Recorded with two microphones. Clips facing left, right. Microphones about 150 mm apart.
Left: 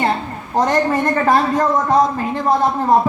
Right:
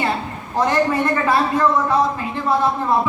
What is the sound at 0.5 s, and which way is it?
Speech, 45° left (ahead or behind).